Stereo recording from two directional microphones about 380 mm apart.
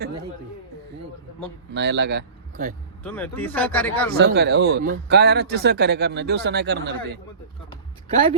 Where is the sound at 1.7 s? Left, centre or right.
Right.